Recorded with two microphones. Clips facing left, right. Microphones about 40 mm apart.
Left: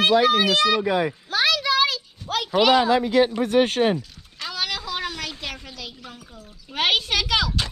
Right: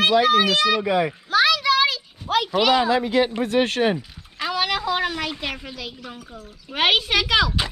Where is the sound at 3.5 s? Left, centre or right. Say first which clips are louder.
Left 1 dB; right.